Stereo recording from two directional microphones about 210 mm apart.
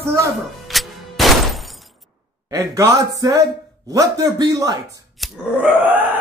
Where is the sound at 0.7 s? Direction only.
Centre (ahead or behind).